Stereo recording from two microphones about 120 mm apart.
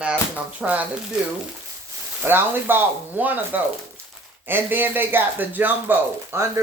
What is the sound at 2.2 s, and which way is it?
Speech, 20° right (ahead or behind).